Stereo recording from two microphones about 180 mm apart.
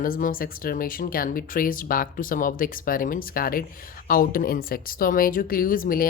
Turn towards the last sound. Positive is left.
turn(degrees=50)  # may be behind; listen again after turning